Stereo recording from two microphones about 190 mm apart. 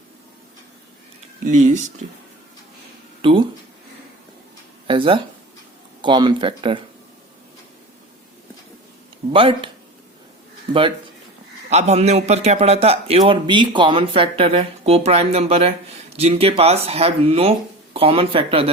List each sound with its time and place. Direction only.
1.5 s a man's voice: 40° right (ahead or behind)
3.2 s speech: 25° right (ahead or behind)
4.9 s speech: 25° right (ahead or behind)
9.3 s speech: 30° right (ahead or behind)
10.7 s a man's voice: 25° right (ahead or behind)